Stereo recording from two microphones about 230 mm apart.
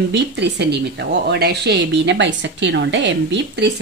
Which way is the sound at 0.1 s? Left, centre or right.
Right.